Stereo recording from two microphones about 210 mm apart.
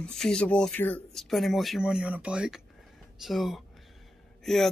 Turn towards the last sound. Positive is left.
turn(degrees=0)  # may be behind; listen again after turning